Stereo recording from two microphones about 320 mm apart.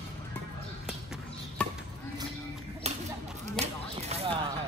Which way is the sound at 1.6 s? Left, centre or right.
Centre.